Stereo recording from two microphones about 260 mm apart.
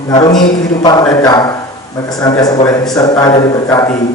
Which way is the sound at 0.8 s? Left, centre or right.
Centre.